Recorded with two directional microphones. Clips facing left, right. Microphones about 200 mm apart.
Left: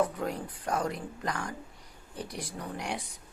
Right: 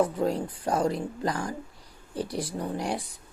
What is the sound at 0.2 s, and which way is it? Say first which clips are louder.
Speech: right 7 dB; 30° right (ahead or behind).